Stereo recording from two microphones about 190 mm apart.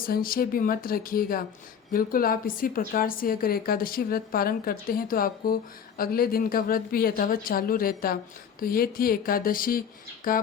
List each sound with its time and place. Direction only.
0.0 s a woman's voice: 50° left (ahead or behind)